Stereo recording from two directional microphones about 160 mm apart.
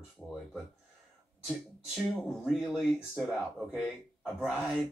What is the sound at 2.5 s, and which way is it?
Speech, centre (ahead or behind).